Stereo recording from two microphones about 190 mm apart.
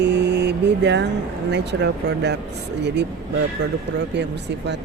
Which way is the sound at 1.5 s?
65° right (ahead or behind).